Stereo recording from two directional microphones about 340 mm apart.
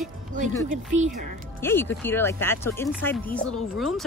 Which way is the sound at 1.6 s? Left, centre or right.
Centre.